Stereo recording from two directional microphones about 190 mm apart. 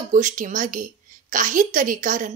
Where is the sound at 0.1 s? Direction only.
40° right (ahead or behind).